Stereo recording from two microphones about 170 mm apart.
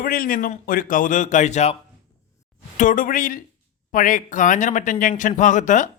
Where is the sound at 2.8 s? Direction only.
50° left (ahead or behind).